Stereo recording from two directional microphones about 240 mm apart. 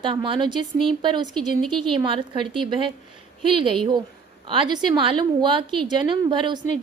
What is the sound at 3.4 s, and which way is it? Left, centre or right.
A woman's voice, right.